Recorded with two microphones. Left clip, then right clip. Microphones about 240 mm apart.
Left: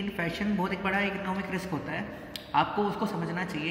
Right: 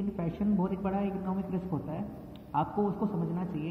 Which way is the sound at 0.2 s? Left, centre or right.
Left.